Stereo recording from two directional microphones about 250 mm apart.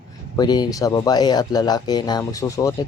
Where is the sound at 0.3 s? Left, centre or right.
Centre.